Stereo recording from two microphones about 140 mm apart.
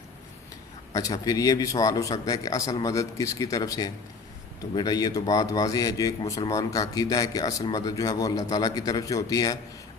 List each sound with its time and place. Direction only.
0.9 s speech: 25° left (ahead or behind)